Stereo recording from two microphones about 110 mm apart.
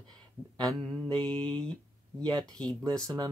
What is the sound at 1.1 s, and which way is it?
Speech, 5° left (ahead or behind).